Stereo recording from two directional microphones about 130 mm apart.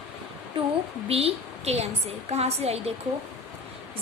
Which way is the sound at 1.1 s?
50° right (ahead or behind).